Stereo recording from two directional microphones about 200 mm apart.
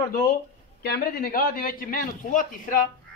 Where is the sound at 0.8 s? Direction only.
50° left (ahead or behind).